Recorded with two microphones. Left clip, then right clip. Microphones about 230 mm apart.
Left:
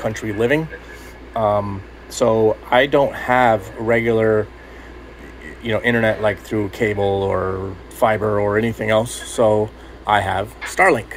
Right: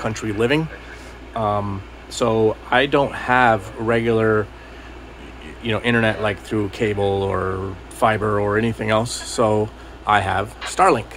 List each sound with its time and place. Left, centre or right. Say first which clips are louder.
0.0 s speech: left 1 dB; centre
5.6 s speech: left 2 dB; centre
9.0 s speech: even; right
9.4 s speech: left 3 dB; centre